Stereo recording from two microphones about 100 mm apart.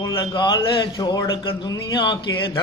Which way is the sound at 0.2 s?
50° left (ahead or behind).